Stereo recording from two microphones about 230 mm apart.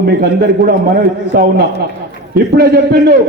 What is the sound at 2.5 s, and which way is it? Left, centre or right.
Speech, right.